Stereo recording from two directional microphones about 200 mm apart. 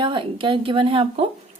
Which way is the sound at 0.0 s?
25° right (ahead or behind).